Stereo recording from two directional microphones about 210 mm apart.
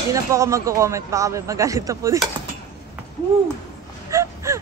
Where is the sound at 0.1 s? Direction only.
15° right (ahead or behind).